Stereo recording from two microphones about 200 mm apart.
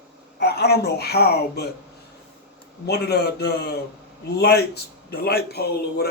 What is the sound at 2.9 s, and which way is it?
Speech, 55° left (ahead or behind).